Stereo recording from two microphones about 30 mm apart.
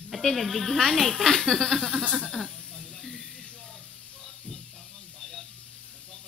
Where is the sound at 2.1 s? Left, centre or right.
Centre.